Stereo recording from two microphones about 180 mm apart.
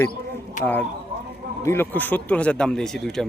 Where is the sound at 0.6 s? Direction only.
45° left (ahead or behind).